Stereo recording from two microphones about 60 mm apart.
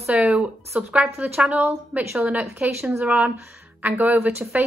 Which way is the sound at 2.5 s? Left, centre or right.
Right.